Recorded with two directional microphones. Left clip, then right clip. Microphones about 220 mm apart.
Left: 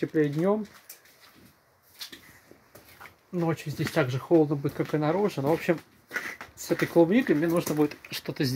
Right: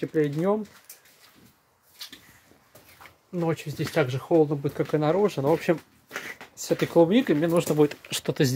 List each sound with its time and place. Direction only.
0.1 s speech: centre (ahead or behind)
3.3 s speech: 5° right (ahead or behind); by 8.5 s 20° right (ahead or behind)